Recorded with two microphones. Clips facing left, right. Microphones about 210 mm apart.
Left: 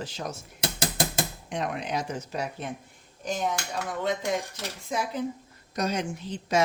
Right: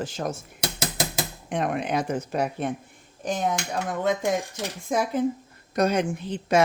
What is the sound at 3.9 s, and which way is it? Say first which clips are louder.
Speech: right 4 dB; 50° right (ahead or behind).